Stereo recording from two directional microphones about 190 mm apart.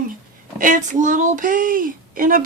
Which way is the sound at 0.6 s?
45° right (ahead or behind).